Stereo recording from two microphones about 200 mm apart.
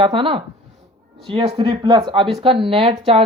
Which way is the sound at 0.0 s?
25° right (ahead or behind).